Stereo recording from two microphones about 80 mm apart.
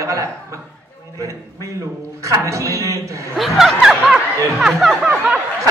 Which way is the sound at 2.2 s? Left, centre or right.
Right.